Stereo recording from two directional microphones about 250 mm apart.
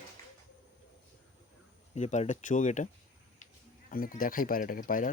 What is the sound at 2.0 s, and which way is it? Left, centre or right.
Speech, left.